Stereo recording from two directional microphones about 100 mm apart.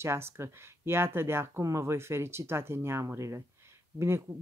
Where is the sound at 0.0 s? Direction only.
25° right (ahead or behind).